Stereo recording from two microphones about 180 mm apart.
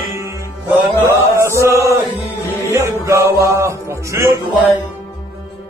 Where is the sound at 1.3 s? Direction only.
15° right (ahead or behind).